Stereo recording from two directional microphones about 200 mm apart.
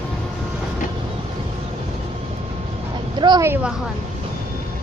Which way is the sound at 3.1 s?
20° right (ahead or behind).